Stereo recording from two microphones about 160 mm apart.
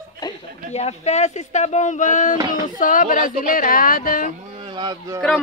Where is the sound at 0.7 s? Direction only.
45° left (ahead or behind); by 4.3 s 60° left (ahead or behind).